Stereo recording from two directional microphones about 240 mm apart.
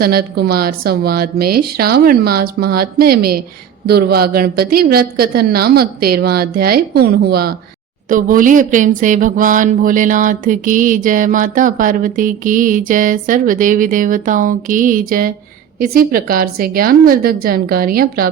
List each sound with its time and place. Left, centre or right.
0.0 s speech: right